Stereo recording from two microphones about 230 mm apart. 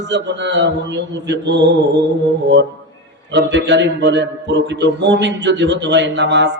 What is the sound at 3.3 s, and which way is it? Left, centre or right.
Mantra, right.